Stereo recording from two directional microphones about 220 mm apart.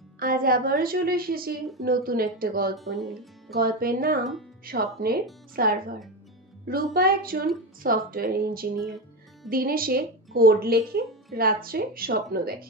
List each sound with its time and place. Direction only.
0.2 s a woman's voice: 40° right (ahead or behind)
2.7 s speech: centre (ahead or behind)
3.5 s a woman's voice: 40° right (ahead or behind)